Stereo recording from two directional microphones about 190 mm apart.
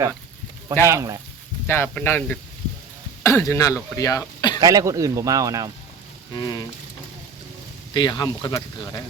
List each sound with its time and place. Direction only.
0.9 s speech: 15° right (ahead or behind)
1.6 s speech: 10° left (ahead or behind)
4.6 s speech: 20° right (ahead or behind)
6.3 s speech: 20° left (ahead or behind)
7.9 s speech: 25° left (ahead or behind)